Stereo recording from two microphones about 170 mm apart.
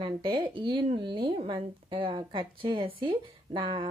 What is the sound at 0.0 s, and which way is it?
Speech, 30° right (ahead or behind).